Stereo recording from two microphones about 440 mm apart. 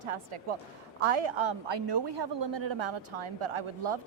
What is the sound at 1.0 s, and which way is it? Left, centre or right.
A woman's voice, right.